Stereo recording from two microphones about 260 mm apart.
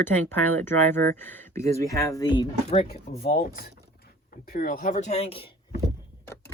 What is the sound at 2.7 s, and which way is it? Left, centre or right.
Speech, left.